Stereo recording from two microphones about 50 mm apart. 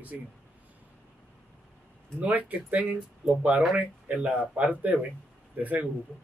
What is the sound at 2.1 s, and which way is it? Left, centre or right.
Speech, right.